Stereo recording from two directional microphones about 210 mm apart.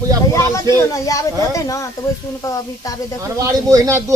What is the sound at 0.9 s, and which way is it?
A woman's voice, 15° left (ahead or behind).